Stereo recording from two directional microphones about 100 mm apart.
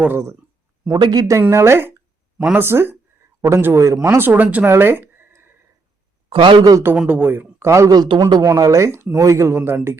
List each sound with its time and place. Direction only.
0.0 s speech: 25° right (ahead or behind)
0.9 s speech: 45° right (ahead or behind)
1.4 s speech: 30° right (ahead or behind)
4.6 s a sound: 20° right (ahead or behind)
6.3 s a man's voice: 60° right (ahead or behind)
6.6 s speech: 40° right (ahead or behind)
6.9 s speech: 15° right (ahead or behind)